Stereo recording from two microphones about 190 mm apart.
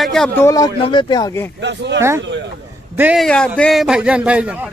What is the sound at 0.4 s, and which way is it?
Speech, 15° left (ahead or behind).